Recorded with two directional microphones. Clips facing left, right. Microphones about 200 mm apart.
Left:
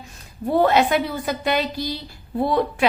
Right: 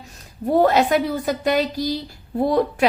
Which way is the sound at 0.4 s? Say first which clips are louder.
Right 1 dB; 40° right (ahead or behind).